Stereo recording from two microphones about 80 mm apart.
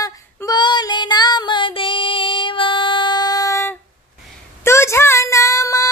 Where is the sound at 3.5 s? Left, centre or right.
Left.